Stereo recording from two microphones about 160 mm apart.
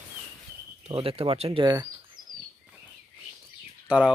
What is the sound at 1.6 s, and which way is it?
Bird, 25° right (ahead or behind).